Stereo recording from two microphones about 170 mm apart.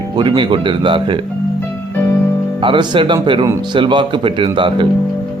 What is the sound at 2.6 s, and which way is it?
Speech, 30° right (ahead or behind).